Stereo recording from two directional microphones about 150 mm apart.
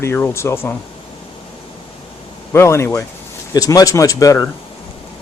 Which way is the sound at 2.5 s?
15° left (ahead or behind).